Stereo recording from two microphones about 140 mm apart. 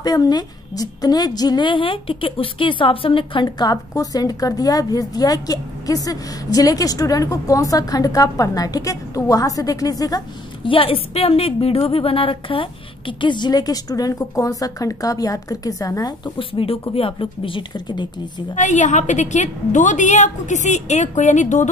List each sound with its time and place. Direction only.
0.0 s a woman's voice: 30° left (ahead or behind)
10.6 s a woman's voice: 40° left (ahead or behind)
18.5 s a woman's voice: 55° left (ahead or behind)